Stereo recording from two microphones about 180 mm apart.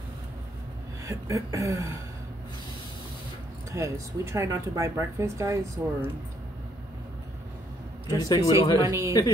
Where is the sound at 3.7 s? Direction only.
15° right (ahead or behind).